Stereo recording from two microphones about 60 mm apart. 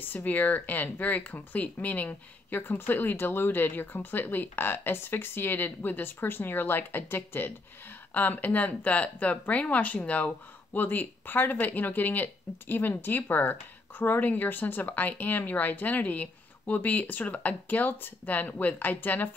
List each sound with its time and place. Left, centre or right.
0.0 s speech: left